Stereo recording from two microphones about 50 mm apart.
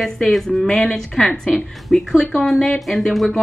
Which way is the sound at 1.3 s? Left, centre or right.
Left.